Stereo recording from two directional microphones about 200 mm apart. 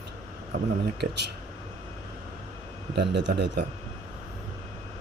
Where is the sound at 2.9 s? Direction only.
60° right (ahead or behind).